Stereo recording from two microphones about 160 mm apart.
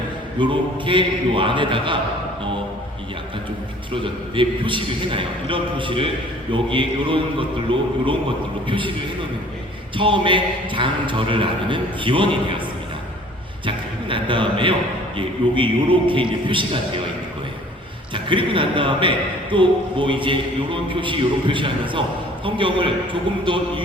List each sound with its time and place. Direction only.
0.3 s a man's voice: 30° right (ahead or behind)
3.9 s a man's voice: 30° right (ahead or behind)
13.7 s a sound: 30° right (ahead or behind)
15.2 s a man's voice: 30° right (ahead or behind)
18.1 s a man's voice: 30° right (ahead or behind)